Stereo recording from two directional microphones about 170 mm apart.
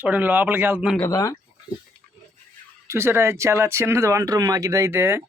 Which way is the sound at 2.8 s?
15° right (ahead or behind).